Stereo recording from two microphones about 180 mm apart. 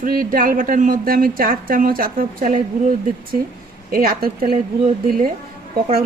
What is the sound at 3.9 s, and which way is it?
Speech, 55° right (ahead or behind).